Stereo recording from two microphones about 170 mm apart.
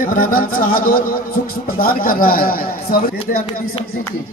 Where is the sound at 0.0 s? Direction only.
55° left (ahead or behind).